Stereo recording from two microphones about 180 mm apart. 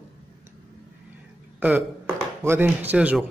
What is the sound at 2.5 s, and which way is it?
Speech, 10° right (ahead or behind).